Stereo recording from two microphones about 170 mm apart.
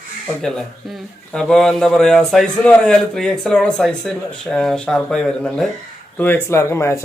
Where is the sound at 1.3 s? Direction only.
5° left (ahead or behind).